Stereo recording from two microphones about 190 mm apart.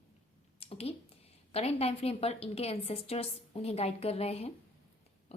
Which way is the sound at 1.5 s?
30° left (ahead or behind).